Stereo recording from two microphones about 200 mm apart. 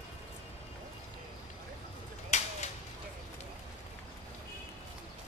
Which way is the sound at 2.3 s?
35° left (ahead or behind).